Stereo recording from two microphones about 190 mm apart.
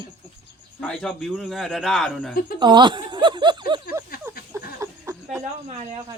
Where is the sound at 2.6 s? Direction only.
25° right (ahead or behind).